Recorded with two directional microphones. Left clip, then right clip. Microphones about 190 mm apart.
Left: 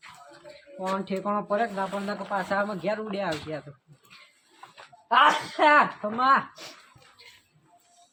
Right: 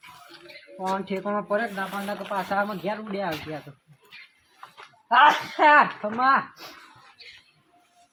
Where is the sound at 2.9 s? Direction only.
20° left (ahead or behind).